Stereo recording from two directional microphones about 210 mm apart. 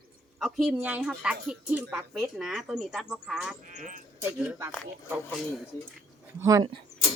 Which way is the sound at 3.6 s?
40° right (ahead or behind).